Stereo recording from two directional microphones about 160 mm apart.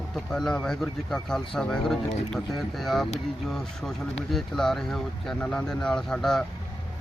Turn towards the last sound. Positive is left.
turn(degrees=5)  # may be behind; listen again after turning